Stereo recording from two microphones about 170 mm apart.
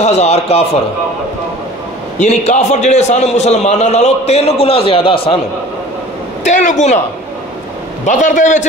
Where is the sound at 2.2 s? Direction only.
40° left (ahead or behind).